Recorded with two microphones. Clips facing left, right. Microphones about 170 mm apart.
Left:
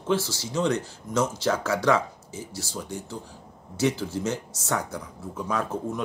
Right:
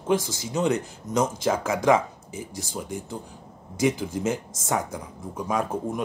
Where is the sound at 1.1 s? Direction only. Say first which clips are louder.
Right 1 dB; 40° right (ahead or behind).